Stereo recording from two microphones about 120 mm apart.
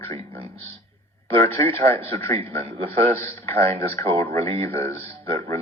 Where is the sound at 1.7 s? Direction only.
55° right (ahead or behind).